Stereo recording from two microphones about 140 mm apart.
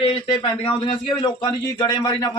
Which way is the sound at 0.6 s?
35° left (ahead or behind).